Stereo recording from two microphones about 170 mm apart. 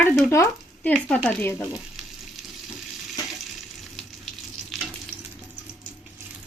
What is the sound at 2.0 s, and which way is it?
Frying, centre (ahead or behind).